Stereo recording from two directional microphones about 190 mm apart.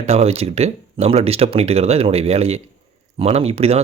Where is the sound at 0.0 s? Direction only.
35° right (ahead or behind).